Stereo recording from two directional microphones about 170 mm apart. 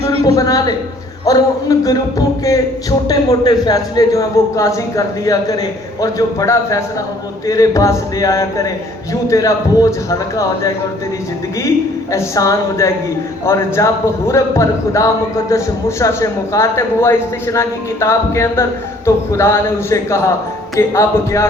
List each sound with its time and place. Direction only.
0.3 s a man's voice: 20° left (ahead or behind)
12.1 s a man's voice: 20° left (ahead or behind)